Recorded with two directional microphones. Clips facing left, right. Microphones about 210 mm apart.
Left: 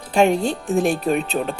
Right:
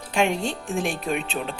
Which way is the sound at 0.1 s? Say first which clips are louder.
Left 6 dB; 40° left (ahead or behind).